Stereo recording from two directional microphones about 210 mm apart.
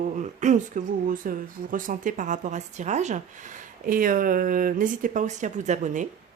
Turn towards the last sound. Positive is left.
turn(degrees=-35)  # may be behind; listen again after turning